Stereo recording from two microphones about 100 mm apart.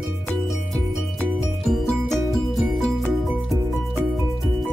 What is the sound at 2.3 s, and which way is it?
Music, centre (ahead or behind).